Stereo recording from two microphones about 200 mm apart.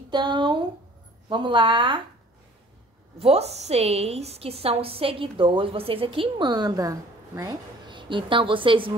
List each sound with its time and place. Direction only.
0.1 s a woman's voice: 20° right (ahead or behind)
3.2 s a woman's voice: 30° right (ahead or behind)